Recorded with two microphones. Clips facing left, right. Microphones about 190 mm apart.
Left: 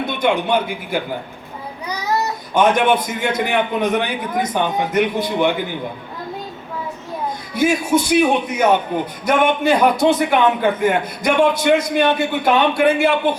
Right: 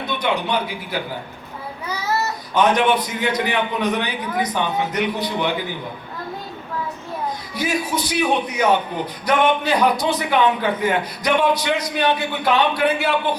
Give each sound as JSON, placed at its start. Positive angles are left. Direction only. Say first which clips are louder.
{"t": 0.0, "sound": "a man's voice", "louder": "left 4 dB", "side_deg": 50}
{"t": 1.9, "sound": "child singing", "louder": "left 2 dB", "side_deg": 15}
{"t": 2.6, "sound": "a man's voice", "louder": "left 2 dB", "side_deg": 50}
{"t": 7.5, "sound": "a man's voice", "louder": "left 8 dB", "side_deg": 50}